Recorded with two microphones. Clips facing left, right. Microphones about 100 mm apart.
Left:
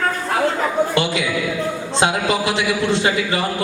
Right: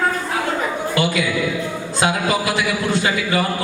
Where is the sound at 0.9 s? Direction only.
25° left (ahead or behind).